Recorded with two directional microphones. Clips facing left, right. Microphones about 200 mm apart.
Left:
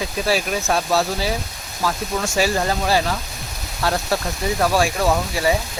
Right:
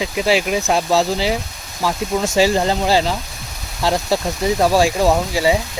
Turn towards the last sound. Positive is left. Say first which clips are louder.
# right 3 dB
turn(degrees=-15)  # may be behind; listen again after turning